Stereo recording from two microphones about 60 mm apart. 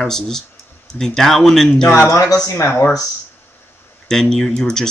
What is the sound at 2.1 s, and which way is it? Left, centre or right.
Speech, left.